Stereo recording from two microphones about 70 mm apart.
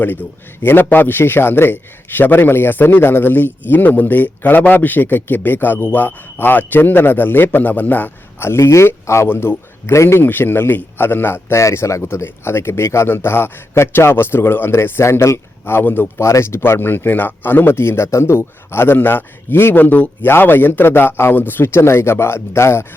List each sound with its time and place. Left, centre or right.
0.0 s speech: left
8.4 s speech: left
10.2 s speech: left
11.5 s speech: left
16.1 s speech: left